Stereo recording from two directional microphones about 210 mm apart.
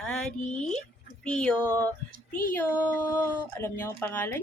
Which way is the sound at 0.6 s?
5° left (ahead or behind).